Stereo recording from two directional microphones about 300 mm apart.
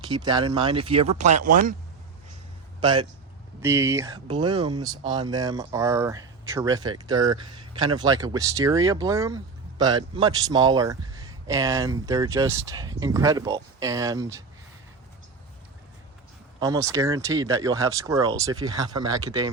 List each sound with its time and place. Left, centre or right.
0.0 s speech: centre
2.8 s speech: centre
16.6 s speech: centre